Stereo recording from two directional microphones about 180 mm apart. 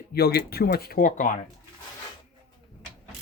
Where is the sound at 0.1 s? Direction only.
60° left (ahead or behind); by 1.5 s 45° left (ahead or behind).